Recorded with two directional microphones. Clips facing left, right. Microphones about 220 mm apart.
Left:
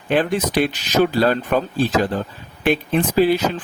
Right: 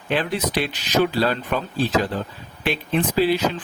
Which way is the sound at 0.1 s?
50° left (ahead or behind).